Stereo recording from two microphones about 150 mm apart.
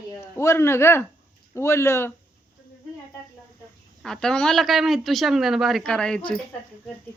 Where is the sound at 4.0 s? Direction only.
5° left (ahead or behind).